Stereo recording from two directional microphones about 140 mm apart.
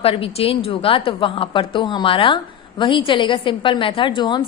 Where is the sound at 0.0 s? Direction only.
45° left (ahead or behind).